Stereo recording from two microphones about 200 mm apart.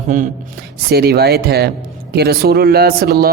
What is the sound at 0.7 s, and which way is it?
Speech, 50° right (ahead or behind).